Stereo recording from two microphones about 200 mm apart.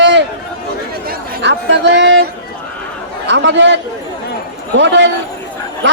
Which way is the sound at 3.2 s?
60° right (ahead or behind).